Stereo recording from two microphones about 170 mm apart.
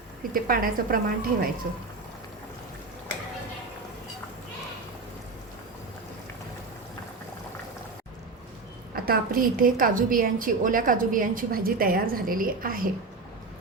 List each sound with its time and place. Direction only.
0.3 s a woman's voice: 55° right (ahead or behind)
9.0 s a woman's voice: 55° right (ahead or behind)